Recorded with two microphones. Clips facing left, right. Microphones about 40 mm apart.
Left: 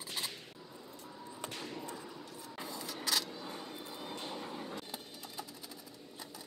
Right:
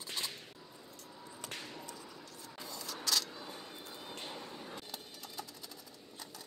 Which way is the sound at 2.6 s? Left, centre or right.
Left.